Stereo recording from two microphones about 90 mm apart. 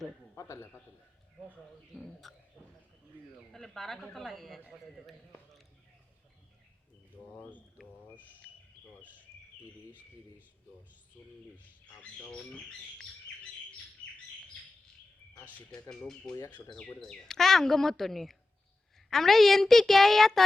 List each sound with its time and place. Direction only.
0.3 s a man's voice: 35° left (ahead or behind)
2.2 s speech: centre (ahead or behind)
3.5 s speech: 5° left (ahead or behind)
7.8 s speech: centre (ahead or behind)
11.2 s speech: 25° left (ahead or behind)
12.2 s speech: 15° left (ahead or behind)
15.9 s speech: 5° left (ahead or behind)